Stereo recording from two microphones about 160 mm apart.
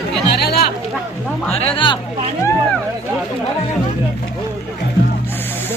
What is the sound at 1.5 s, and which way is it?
Speech, 35° left (ahead or behind).